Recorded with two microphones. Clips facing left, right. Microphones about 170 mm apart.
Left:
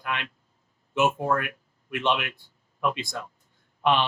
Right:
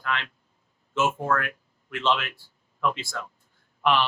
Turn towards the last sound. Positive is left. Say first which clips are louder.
# even
turn(degrees=20)  # may be behind; listen again after turning